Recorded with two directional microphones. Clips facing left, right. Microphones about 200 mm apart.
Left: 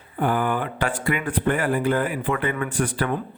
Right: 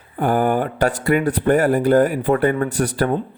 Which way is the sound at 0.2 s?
45° right (ahead or behind).